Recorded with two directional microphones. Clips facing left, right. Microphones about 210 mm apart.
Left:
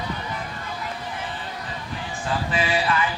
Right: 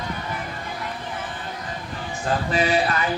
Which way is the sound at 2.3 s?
40° right (ahead or behind).